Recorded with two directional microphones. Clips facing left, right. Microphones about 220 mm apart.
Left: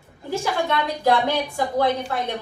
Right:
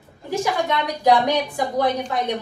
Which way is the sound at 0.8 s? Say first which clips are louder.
Right 3 dB; 15° right (ahead or behind).